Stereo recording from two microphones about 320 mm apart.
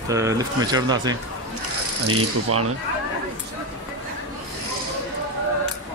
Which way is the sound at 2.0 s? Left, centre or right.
Right.